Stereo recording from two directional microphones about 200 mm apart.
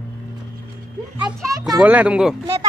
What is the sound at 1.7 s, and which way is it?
Speech, 5° right (ahead or behind).